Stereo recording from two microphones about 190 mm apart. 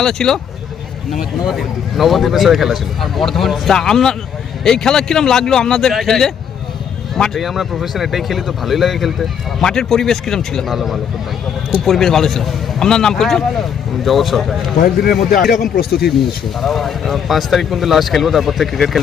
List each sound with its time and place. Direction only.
0.0 s a man's voice: centre (ahead or behind)
1.5 s a man's voice: centre (ahead or behind)
15.0 s speech: 50° left (ahead or behind)
16.6 s a man's voice: centre (ahead or behind)